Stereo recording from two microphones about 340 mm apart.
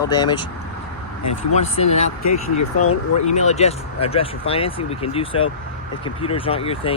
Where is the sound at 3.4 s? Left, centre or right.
Centre.